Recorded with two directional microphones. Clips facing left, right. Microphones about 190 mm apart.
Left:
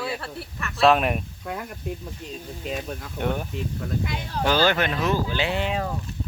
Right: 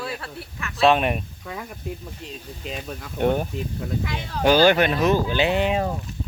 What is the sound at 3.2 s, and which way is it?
Speech, 30° right (ahead or behind).